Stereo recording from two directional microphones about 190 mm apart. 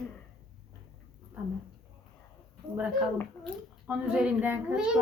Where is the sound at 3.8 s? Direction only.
5° right (ahead or behind).